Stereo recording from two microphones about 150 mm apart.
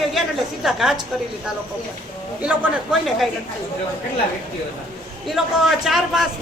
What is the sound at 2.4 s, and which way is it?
Speech, 5° right (ahead or behind).